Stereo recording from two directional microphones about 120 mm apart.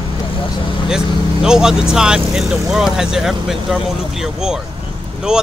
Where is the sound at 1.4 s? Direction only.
5° right (ahead or behind).